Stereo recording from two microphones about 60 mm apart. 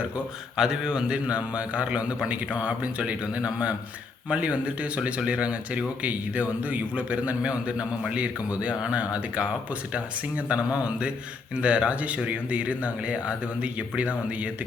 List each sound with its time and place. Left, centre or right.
0.5 s a man's voice: centre